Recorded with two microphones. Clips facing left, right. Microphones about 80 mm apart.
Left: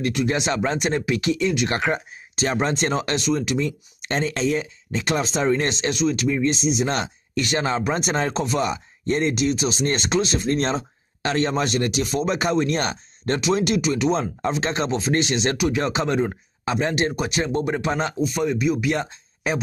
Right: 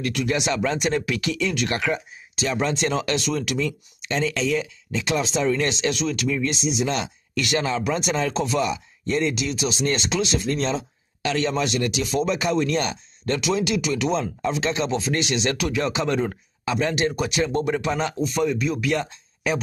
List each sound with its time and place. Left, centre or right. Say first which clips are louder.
0.0 s speech: left 2 dB; left
1.7 s speech: left 2 dB; left
4.0 s speech: left 1 dB; left
6.5 s speech: left 2 dB; left
7.3 s speech: left 1 dB; left
14.4 s speech: even; left
16.1 s speech: left 1 dB; centre
16.6 s speech: even; left
18.2 s speech: left 2 dB; left
18.9 s speech: left 1 dB; left